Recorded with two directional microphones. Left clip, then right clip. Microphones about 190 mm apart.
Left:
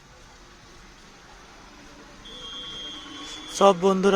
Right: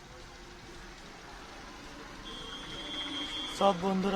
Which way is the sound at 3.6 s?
40° left (ahead or behind).